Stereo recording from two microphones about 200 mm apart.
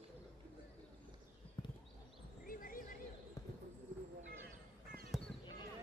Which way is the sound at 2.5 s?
45° left (ahead or behind).